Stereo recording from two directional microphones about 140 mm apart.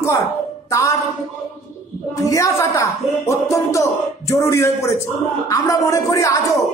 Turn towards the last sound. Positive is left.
turn(degrees=25)  # may be behind; listen again after turning